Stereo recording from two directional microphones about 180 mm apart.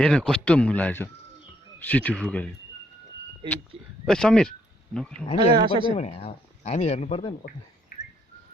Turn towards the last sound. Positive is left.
turn(degrees=35)  # may be behind; listen again after turning